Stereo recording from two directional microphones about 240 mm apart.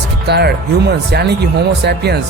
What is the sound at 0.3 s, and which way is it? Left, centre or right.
Speech, right.